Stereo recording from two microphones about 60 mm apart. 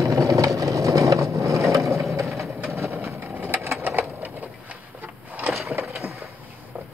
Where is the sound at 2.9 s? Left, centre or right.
Right.